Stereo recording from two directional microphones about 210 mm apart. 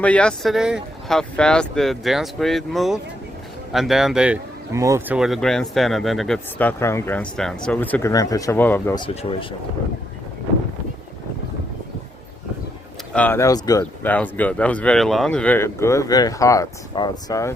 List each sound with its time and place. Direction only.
0.0 s speech: 5° left (ahead or behind)
9.0 s speech: 25° left (ahead or behind)
13.1 s speech: 10° left (ahead or behind)